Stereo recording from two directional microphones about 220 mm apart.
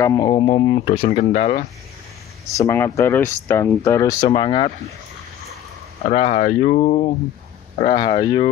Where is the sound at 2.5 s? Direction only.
15° left (ahead or behind).